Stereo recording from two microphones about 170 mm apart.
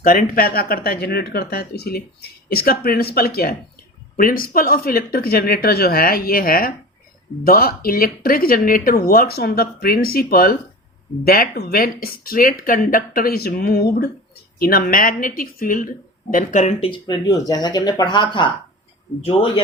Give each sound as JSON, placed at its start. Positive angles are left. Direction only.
{"t": 0.0, "sound": "a man's voice", "side_deg": 55}